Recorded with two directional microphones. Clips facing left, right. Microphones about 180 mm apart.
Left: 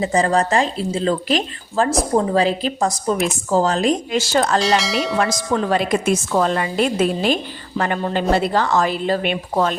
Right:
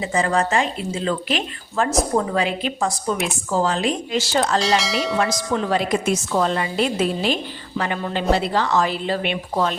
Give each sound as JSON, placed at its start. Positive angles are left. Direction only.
{"t": 0.0, "sound": "a woman's voice", "side_deg": 35}
{"t": 4.6, "sound": "speech", "side_deg": 0}
{"t": 5.7, "sound": "a woman's voice", "side_deg": 50}